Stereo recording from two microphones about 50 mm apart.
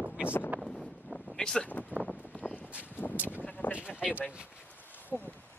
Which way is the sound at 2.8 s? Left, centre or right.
Left.